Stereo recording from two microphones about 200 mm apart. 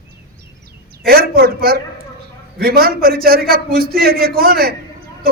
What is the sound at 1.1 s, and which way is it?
A man's voice, 50° right (ahead or behind).